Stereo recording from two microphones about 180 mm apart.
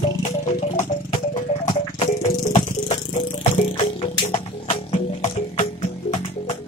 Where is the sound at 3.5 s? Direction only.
40° left (ahead or behind).